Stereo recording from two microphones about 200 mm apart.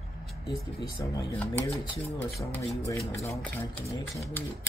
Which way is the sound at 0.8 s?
15° left (ahead or behind).